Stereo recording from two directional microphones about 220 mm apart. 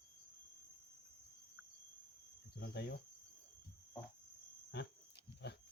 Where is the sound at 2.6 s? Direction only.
50° left (ahead or behind).